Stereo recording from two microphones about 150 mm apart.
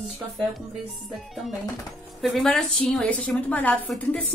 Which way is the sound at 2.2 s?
Centre (ahead or behind).